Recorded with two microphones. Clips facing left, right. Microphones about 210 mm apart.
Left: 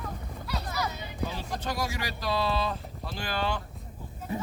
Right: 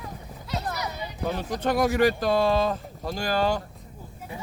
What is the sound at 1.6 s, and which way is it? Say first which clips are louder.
Speech: right 13 dB; 55° right (ahead or behind).